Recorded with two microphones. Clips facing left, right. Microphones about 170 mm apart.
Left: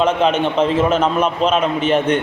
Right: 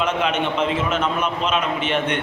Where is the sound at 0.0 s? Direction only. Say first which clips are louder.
Left 6 dB; 30° left (ahead or behind).